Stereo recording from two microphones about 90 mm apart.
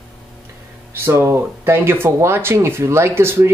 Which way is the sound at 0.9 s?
30° right (ahead or behind).